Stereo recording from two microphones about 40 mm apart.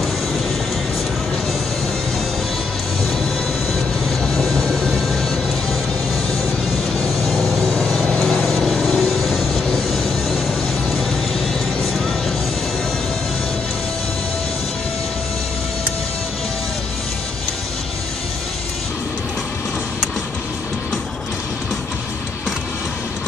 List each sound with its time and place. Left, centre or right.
4.2 s vehicle: centre
7.7 s vehicle: centre
8.2 s vehicle: centre
9.2 s music: centre